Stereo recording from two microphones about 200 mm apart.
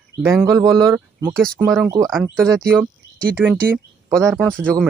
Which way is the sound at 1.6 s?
10° right (ahead or behind).